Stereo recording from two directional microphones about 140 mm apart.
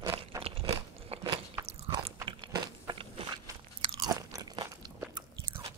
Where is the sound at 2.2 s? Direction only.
35° right (ahead or behind).